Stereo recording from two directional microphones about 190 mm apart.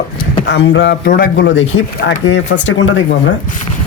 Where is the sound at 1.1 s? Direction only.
55° left (ahead or behind); by 3.0 s 85° left.